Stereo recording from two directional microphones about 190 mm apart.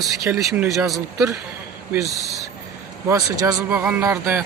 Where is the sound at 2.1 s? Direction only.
Centre (ahead or behind).